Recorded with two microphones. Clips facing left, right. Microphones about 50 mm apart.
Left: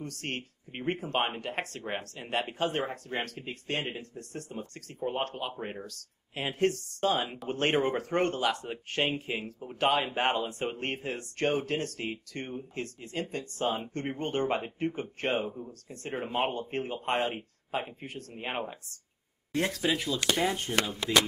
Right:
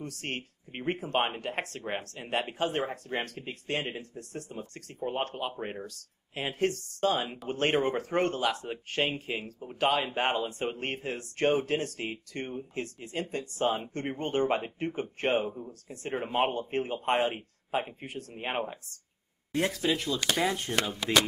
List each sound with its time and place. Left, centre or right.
0.0 s speech: centre
11.4 s speech: centre
19.8 s speech: centre